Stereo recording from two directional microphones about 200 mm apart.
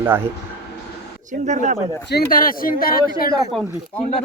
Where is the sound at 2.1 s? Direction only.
50° left (ahead or behind).